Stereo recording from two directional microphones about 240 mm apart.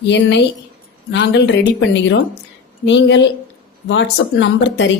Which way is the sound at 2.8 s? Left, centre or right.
Left.